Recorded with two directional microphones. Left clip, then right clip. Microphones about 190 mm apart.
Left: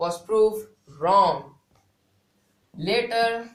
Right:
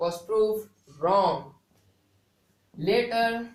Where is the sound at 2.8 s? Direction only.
25° left (ahead or behind).